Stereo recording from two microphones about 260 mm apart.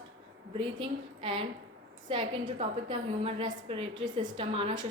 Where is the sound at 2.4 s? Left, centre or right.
Right.